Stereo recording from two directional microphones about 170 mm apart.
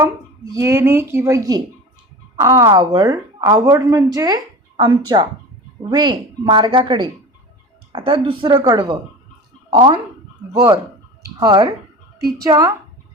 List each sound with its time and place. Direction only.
0.5 s a woman's voice: 15° right (ahead or behind)